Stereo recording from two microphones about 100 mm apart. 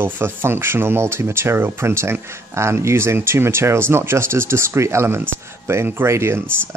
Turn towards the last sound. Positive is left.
turn(degrees=-25)  # may be behind; listen again after turning